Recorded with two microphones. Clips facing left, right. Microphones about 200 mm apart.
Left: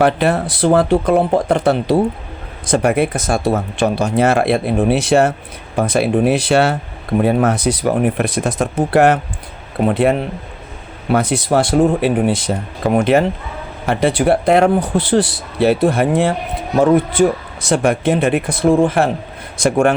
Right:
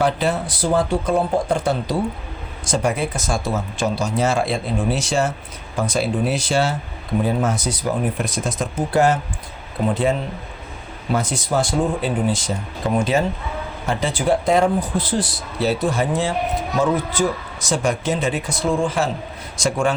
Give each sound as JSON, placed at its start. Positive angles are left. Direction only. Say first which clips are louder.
{"t": 0.0, "sound": "speech", "louder": "left 5 dB", "side_deg": 60}